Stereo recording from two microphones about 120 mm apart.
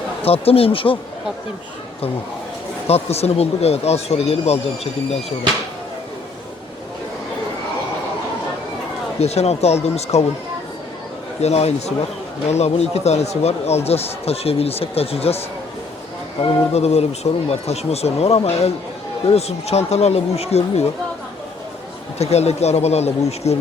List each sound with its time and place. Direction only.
0.3 s speech: 55° left (ahead or behind)
2.8 s speech: 60° left (ahead or behind)
9.2 s speech: 60° left (ahead or behind)
11.3 s speech: 65° left (ahead or behind)
22.2 s speech: 60° left (ahead or behind)